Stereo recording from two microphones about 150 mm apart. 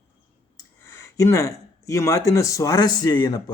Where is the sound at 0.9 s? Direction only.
20° left (ahead or behind).